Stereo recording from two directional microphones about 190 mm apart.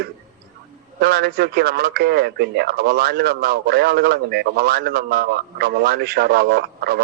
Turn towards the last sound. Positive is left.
turn(degrees=-55)  # may be behind; listen again after turning